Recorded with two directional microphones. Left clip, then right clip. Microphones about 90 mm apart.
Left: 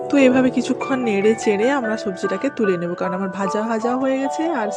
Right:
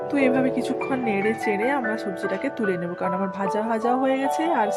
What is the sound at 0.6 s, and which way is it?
Speech, 45° left (ahead or behind).